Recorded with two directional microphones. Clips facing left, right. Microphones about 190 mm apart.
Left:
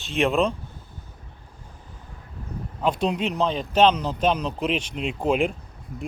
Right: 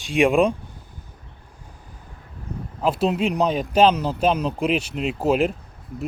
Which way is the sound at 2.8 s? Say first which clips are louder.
Right 3 dB; 5° right (ahead or behind).